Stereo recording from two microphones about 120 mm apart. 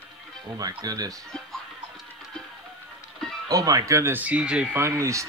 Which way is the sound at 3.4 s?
30° right (ahead or behind).